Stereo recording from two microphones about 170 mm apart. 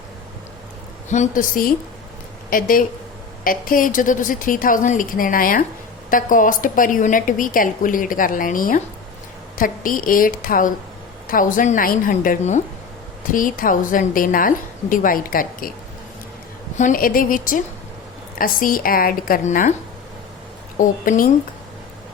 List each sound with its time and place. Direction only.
1.1 s a woman's voice: 50° left (ahead or behind)
16.7 s a woman's voice: 50° left (ahead or behind)
20.7 s a woman's voice: 50° left (ahead or behind)